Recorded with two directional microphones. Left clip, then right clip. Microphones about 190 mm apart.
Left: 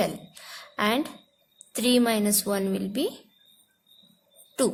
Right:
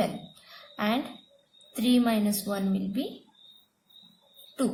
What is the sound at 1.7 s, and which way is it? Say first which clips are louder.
A woman's voice: left 3 dB; 40° left (ahead or behind).